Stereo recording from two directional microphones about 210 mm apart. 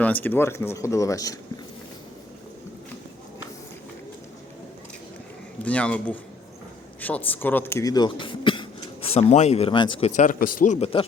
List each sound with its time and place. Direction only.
0.0 s speech: 10° left (ahead or behind)
5.6 s speech: 5° left (ahead or behind); by 10.1 s 25° left (ahead or behind)
10.2 s a man's voice: 40° left (ahead or behind)